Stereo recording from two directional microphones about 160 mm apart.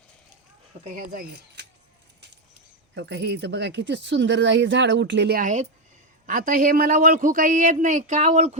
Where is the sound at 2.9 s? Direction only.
90° right.